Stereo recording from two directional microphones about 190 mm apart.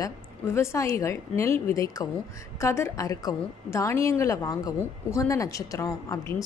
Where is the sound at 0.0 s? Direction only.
15° left (ahead or behind).